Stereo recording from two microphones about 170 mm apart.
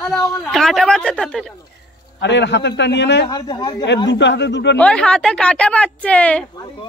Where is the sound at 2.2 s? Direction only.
90° left.